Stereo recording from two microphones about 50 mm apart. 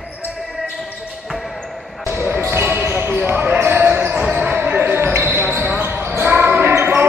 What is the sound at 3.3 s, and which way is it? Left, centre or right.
Basketball bounce, right.